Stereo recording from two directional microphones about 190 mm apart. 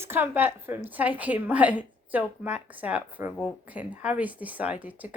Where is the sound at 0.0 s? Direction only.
10° right (ahead or behind).